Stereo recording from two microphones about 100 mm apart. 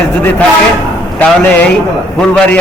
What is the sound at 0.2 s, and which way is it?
Speech, 15° left (ahead or behind).